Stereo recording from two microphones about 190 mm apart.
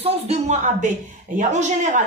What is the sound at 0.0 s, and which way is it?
A woman's voice, 35° right (ahead or behind).